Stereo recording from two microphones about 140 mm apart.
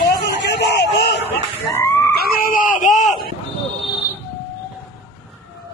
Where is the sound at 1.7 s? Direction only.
15° left (ahead or behind).